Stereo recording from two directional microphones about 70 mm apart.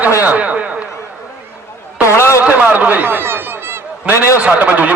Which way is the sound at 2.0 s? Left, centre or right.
Left.